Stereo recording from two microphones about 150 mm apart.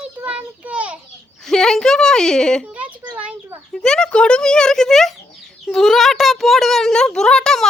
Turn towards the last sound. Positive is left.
turn(degrees=5)  # may be behind; listen again after turning